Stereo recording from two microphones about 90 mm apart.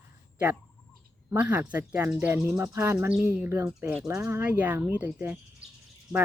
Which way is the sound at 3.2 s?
15° right (ahead or behind).